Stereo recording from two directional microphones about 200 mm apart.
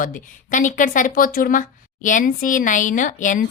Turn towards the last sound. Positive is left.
turn(degrees=40)  # may be behind; listen again after turning